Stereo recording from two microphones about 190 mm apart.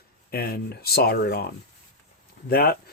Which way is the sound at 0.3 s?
55° left (ahead or behind).